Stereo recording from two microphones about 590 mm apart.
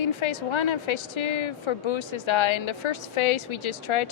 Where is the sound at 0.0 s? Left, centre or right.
Left.